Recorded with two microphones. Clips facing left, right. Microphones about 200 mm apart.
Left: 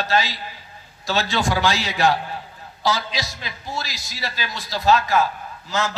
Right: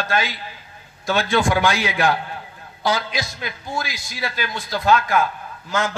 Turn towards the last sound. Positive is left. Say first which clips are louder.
# right 1 dB
turn(degrees=-55)  # may be behind; listen again after turning